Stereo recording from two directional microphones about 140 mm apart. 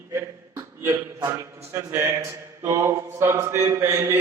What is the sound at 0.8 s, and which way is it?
A man's voice, 20° right (ahead or behind).